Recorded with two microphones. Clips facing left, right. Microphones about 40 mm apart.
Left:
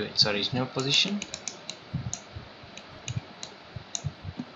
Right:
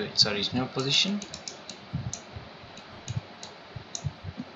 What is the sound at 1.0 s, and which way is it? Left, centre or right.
Speech, left.